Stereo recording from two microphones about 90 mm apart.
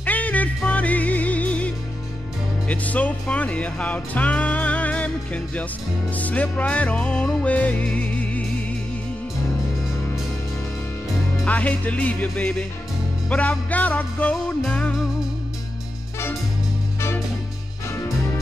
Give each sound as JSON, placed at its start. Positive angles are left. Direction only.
{"t": 0.0, "sound": "music", "side_deg": 15}
{"t": 2.7, "sound": "music", "side_deg": 15}
{"t": 11.4, "sound": "music", "side_deg": 15}
{"t": 14.3, "sound": "music", "side_deg": 0}